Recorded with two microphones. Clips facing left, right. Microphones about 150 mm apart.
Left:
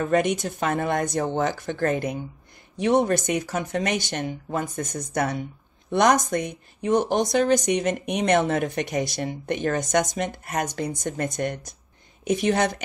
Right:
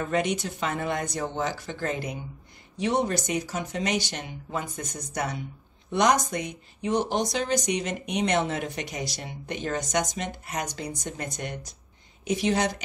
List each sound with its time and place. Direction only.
0.1 s speech: 50° left (ahead or behind)